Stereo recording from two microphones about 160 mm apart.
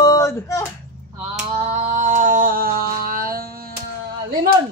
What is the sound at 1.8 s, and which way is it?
Music, 50° right (ahead or behind).